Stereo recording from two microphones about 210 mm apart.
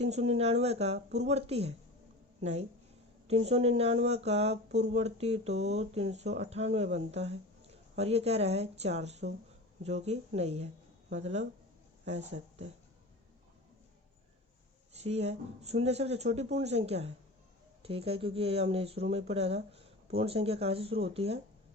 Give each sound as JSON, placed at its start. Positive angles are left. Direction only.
{"t": 0.0, "sound": "speech", "side_deg": -30}
{"t": 15.0, "sound": "speech", "side_deg": -30}